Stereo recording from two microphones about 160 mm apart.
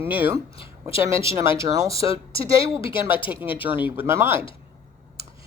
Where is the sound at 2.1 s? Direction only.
35° left (ahead or behind).